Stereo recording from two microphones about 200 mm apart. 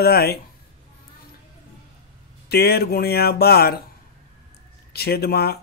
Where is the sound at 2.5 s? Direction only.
50° left (ahead or behind).